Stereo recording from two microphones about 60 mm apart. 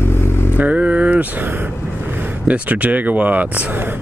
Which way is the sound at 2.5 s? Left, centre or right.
Right.